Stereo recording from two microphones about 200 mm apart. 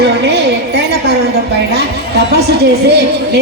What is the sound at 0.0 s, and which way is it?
A woman's voice, 60° right (ahead or behind).